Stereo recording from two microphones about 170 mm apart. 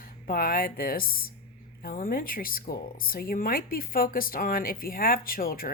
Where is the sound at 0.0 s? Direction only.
60° left (ahead or behind).